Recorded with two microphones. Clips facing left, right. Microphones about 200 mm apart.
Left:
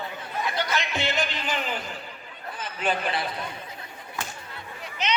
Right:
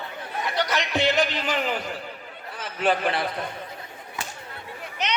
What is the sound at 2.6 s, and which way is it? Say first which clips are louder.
Speech: right 4 dB; 65° right (ahead or behind).